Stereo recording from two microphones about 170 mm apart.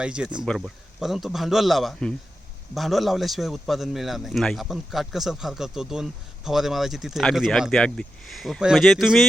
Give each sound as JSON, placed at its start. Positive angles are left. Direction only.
{"t": 0.0, "sound": "a man's voice", "side_deg": -5}